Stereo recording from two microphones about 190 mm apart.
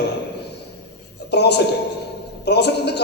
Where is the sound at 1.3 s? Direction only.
60° left (ahead or behind).